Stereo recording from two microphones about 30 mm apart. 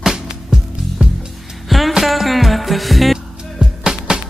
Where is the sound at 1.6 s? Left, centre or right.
Centre.